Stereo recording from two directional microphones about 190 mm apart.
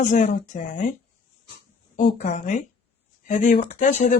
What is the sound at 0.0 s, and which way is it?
Speech, 40° left (ahead or behind).